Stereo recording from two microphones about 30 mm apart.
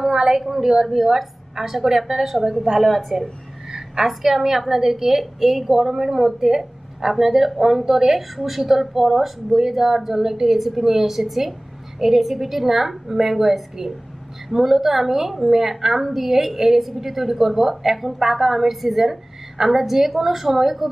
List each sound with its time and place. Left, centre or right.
0.4 s a woman's voice: centre
2.8 s speech: centre
3.7 s a sound: centre
4.1 s a woman's voice: centre